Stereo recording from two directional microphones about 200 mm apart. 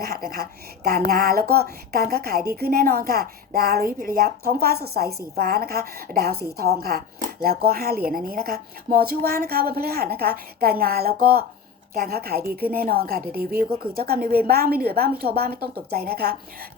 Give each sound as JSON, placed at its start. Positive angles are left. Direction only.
{"t": 0.9, "sound": "a woman's voice", "side_deg": -50}